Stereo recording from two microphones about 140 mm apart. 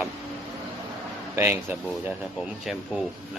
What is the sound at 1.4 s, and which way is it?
Speech, 15° right (ahead or behind).